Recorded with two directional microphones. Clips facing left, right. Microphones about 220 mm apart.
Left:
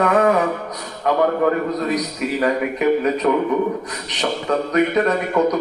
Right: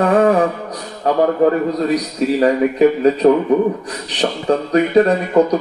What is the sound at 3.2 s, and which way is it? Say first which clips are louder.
Speech: right 7 dB; 35° right (ahead or behind).